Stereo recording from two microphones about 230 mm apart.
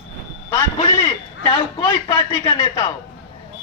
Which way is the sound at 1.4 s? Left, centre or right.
Left.